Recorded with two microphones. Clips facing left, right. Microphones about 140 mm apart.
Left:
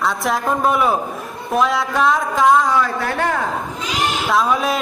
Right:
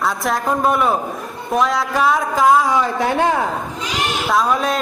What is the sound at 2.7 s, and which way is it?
Speech, 15° right (ahead or behind).